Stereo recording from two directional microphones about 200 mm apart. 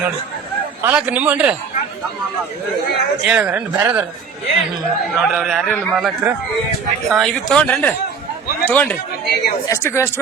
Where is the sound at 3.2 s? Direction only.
5° right (ahead or behind).